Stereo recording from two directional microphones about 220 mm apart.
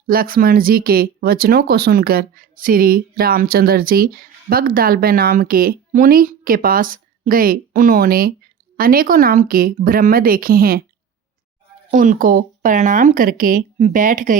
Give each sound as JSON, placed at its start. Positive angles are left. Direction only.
{"t": 0.1, "sound": "speech", "side_deg": -40}
{"t": 11.9, "sound": "speech", "side_deg": -35}